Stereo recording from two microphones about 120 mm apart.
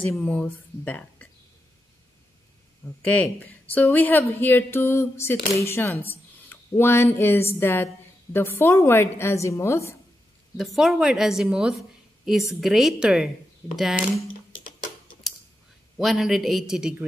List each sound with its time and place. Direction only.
0.1 s a woman's voice: 10° left (ahead or behind)
3.0 s a woman's voice: 10° left (ahead or behind)
10.6 s a woman's voice: centre (ahead or behind)
16.0 s a woman's voice: centre (ahead or behind)